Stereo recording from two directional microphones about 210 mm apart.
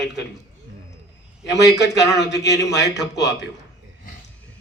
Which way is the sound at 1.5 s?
55° left (ahead or behind).